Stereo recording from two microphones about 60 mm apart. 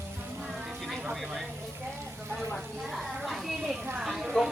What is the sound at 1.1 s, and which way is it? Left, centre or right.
Speech, centre.